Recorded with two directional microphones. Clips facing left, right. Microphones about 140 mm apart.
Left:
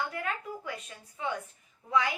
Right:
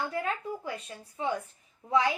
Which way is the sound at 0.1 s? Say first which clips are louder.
Right 3 dB; 30° right (ahead or behind).